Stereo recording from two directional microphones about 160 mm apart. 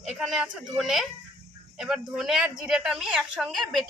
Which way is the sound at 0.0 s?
5° right (ahead or behind).